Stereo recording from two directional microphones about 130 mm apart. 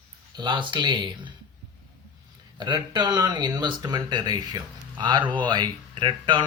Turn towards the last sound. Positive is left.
turn(degrees=-40)  # may be behind; listen again after turning